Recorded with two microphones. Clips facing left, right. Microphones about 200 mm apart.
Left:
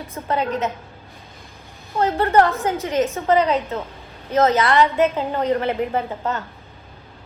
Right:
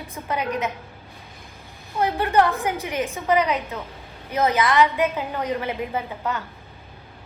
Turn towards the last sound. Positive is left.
turn(degrees=50)  # may be behind; listen again after turning